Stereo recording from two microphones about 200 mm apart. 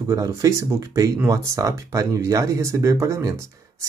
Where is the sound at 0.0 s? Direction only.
15° right (ahead or behind).